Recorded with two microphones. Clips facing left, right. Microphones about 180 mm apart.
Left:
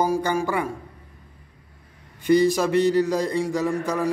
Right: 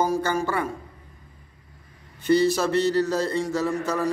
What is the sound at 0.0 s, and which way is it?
Speech, 15° left (ahead or behind).